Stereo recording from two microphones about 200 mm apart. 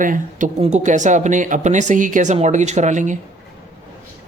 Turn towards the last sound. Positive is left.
turn(degrees=-40)  # may be behind; listen again after turning